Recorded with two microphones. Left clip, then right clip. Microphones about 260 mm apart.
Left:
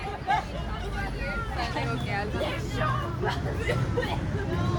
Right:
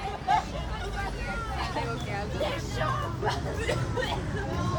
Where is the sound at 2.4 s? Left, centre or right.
Right.